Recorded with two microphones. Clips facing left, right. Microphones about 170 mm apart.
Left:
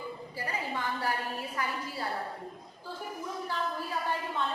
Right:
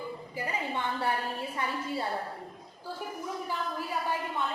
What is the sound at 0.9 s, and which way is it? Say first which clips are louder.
A woman's voice: right 2 dB; 25° right (ahead or behind).